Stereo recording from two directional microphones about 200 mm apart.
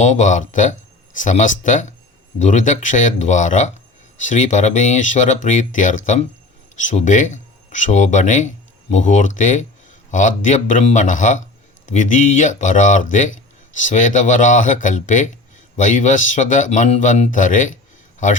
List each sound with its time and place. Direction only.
0.0 s speech: 35° left (ahead or behind)